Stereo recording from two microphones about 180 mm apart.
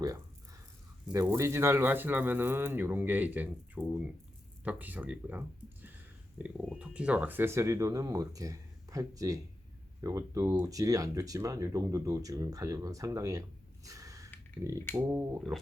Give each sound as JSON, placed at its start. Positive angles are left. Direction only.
{"t": 1.1, "sound": "speech", "side_deg": -15}
{"t": 13.8, "sound": "snort", "side_deg": -20}
{"t": 14.9, "sound": "speech", "side_deg": -10}